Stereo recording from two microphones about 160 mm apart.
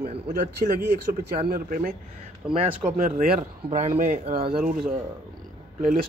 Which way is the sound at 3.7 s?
50° right (ahead or behind).